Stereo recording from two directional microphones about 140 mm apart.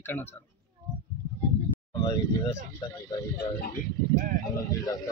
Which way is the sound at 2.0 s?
25° left (ahead or behind).